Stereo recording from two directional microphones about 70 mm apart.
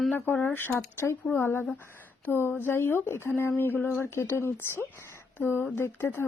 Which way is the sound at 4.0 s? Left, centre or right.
Left.